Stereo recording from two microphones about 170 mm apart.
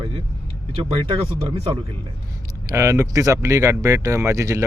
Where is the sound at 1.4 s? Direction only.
35° right (ahead or behind).